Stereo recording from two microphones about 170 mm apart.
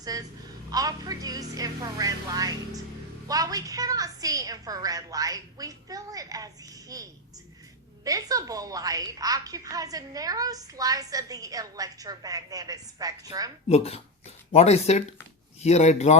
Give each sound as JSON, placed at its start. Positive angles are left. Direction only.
{"t": 0.0, "sound": "a woman's voice", "side_deg": -20}
{"t": 13.7, "sound": "speech", "side_deg": 35}